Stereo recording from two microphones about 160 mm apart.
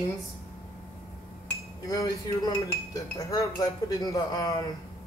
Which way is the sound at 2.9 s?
20° left (ahead or behind).